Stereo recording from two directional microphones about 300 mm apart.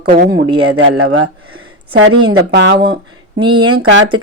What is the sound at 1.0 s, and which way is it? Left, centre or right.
A woman's voice, right.